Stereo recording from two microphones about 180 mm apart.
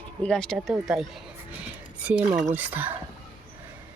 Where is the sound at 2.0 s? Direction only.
5° right (ahead or behind).